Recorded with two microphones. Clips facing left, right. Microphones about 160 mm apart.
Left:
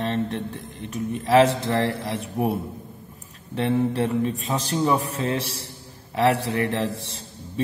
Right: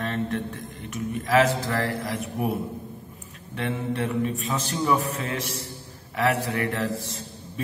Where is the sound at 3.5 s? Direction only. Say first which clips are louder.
Left 6 dB; 30° left (ahead or behind).